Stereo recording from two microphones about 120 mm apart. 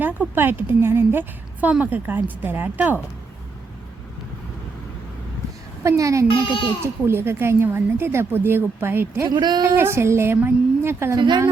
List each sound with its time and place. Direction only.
0.0 s a woman's voice: 15° right (ahead or behind)
5.8 s a woman's voice: 25° right (ahead or behind)
9.3 s speech: 35° right (ahead or behind)
9.7 s a woman's voice: 20° right (ahead or behind)
11.2 s speech: 40° right (ahead or behind)